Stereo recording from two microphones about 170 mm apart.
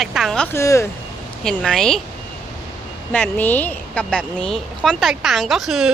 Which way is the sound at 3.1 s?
10° left (ahead or behind).